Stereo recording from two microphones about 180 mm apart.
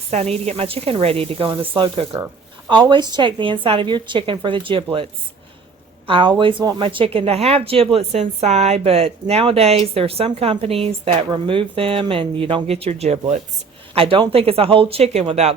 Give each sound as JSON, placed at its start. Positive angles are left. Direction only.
{"t": 0.1, "sound": "a woman's voice", "side_deg": -40}
{"t": 6.1, "sound": "speech", "side_deg": -25}